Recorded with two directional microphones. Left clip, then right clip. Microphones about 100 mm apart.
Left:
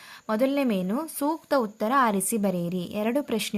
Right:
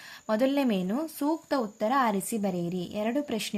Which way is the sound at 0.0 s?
20° left (ahead or behind).